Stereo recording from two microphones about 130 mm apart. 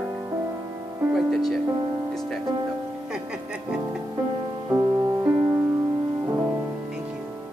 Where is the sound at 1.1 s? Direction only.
Centre (ahead or behind).